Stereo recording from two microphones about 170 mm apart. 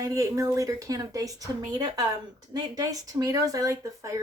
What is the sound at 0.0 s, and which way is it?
Speech, 20° right (ahead or behind).